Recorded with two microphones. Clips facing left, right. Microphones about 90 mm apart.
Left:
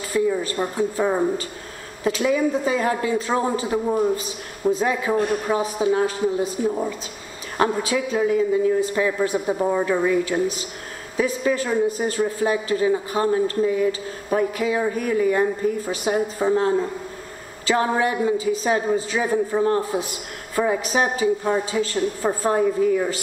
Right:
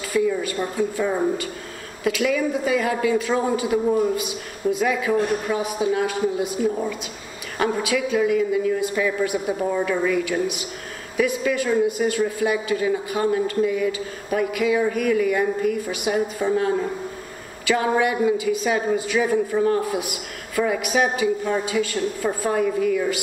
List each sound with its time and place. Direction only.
0.1 s a woman's voice: 30° left (ahead or behind)
17.6 s a woman's voice: 35° left (ahead or behind)